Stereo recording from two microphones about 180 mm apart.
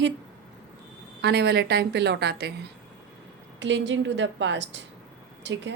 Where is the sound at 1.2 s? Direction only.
65° right (ahead or behind).